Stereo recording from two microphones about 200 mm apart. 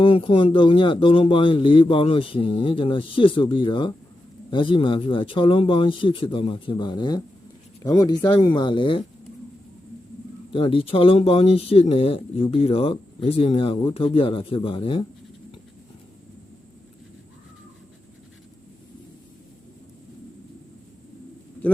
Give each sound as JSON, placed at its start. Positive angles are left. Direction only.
{"t": 0.0, "sound": "speech", "side_deg": 25}
{"t": 10.5, "sound": "speech", "side_deg": 25}